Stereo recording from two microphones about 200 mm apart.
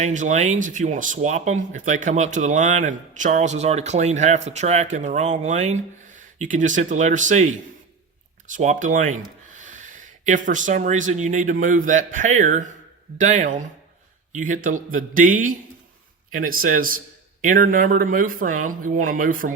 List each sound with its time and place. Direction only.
0.0 s speech: 40° right (ahead or behind)
8.5 s speech: 40° right (ahead or behind)